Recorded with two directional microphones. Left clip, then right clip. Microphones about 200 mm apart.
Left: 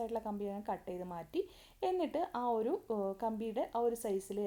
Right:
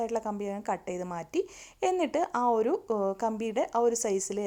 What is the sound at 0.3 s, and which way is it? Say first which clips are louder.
Speech: right 6 dB; 15° right (ahead or behind).